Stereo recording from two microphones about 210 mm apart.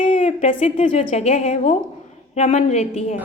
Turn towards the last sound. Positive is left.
turn(degrees=30)  # may be behind; listen again after turning